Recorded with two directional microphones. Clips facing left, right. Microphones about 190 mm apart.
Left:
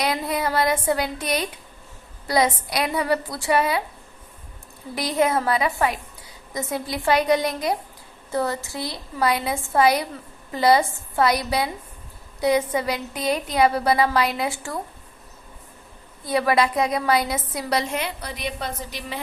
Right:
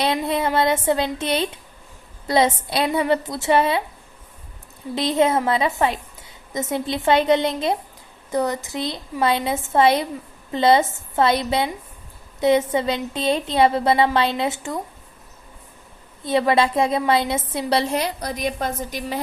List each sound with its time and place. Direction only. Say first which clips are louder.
0.0 s a woman's voice: right 3 dB; 25° right (ahead or behind)
4.9 s a woman's voice: right 3 dB; 25° right (ahead or behind)
16.2 s a woman's voice: right 2 dB; 25° right (ahead or behind); by 19.2 s 45° right (ahead or behind)